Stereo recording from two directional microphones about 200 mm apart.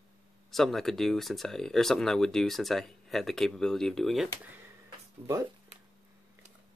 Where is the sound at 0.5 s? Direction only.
Centre (ahead or behind).